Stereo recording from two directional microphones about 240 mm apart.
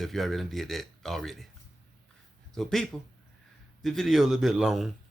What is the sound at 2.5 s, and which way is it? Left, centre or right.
Speech, centre.